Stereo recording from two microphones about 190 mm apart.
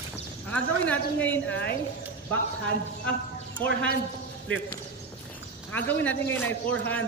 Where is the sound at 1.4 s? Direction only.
60° left (ahead or behind).